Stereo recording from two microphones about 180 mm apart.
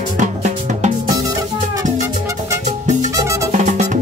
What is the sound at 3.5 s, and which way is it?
Music, 40° right (ahead or behind).